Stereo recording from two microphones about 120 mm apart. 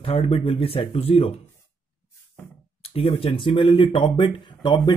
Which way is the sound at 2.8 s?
55° left (ahead or behind).